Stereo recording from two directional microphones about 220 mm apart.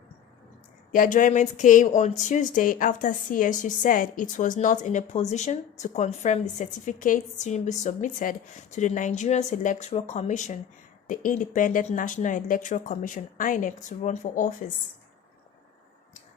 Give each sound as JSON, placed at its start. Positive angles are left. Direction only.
{"t": 0.9, "sound": "a woman's voice", "side_deg": 40}